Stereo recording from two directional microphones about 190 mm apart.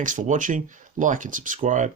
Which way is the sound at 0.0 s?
45° right (ahead or behind).